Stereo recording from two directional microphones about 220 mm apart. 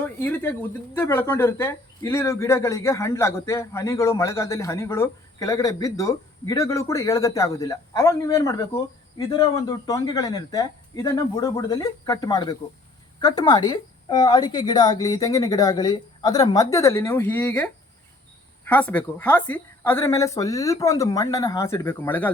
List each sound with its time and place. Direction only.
0.0 s speech: 10° left (ahead or behind)